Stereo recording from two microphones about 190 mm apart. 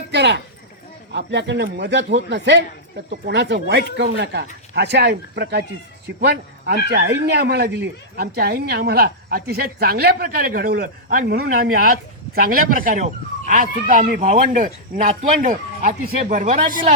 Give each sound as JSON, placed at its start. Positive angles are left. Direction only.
{"t": 0.1, "sound": "a man's voice", "side_deg": -65}